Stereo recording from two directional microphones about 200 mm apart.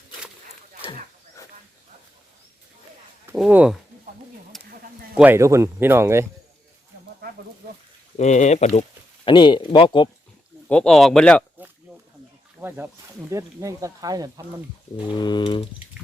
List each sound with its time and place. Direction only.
3.3 s speech: 5° right (ahead or behind)
4.5 s a sound: centre (ahead or behind)
5.1 s speech: 10° right (ahead or behind)
8.1 s speech: 35° left (ahead or behind)
9.2 s speech: 25° left (ahead or behind)
10.7 s speech: 5° left (ahead or behind)
12.5 s speech: 10° right (ahead or behind)
15.1 s speech: 20° left (ahead or behind)